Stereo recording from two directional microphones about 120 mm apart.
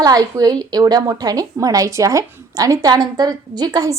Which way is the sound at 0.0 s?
30° right (ahead or behind).